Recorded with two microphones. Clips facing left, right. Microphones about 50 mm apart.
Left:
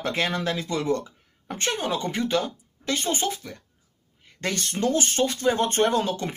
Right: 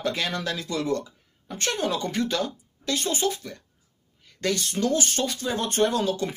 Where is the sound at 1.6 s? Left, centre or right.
Left.